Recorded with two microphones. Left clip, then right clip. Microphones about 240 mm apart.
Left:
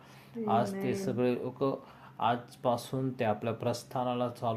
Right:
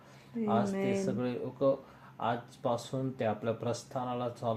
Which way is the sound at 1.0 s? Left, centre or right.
Left.